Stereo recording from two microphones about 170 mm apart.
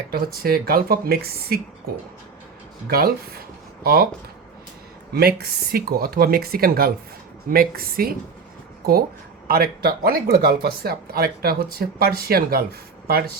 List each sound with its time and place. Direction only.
0.1 s speech: 60° right (ahead or behind)
2.8 s speech: 60° right (ahead or behind)
5.1 s speech: 65° right (ahead or behind)